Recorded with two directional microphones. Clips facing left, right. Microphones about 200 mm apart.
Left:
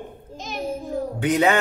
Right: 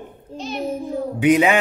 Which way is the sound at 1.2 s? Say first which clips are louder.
Right 4 dB; 10° right (ahead or behind).